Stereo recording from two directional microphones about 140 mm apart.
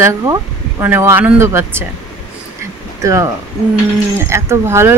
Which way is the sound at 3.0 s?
20° right (ahead or behind).